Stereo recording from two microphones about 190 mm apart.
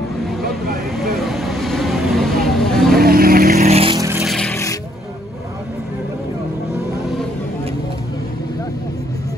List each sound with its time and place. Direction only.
0.9 s vehicle: centre (ahead or behind)
3.0 s vehicle: 50° right (ahead or behind)
3.6 s vehicle: 30° right (ahead or behind)
4.2 s music: 5° left (ahead or behind)